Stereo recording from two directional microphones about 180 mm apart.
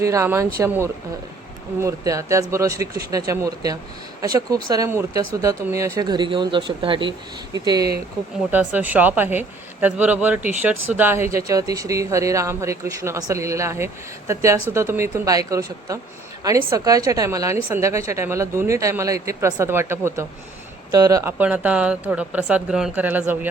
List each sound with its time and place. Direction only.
0.0 s speech: 15° right (ahead or behind)
1.8 s speech: 15° right (ahead or behind)
8.4 s speech: 10° right (ahead or behind)